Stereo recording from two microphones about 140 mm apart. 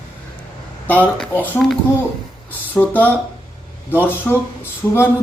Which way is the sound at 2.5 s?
10° left (ahead or behind).